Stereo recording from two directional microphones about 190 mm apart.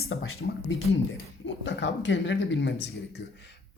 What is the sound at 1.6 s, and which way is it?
Speech, 70° left (ahead or behind).